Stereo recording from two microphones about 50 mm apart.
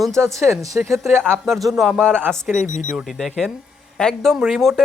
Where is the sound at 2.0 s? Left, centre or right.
Right.